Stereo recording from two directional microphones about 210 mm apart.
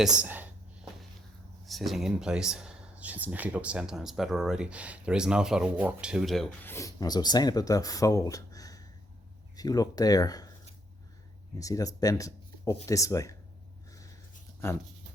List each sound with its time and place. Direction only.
0.0 s a sound: 5° right (ahead or behind)
1.6 s speech: centre (ahead or behind); by 10.5 s 15° left (ahead or behind)
11.6 s speech: 15° left (ahead or behind)